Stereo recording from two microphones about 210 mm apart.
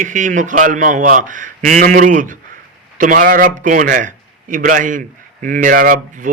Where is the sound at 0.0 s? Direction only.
35° right (ahead or behind).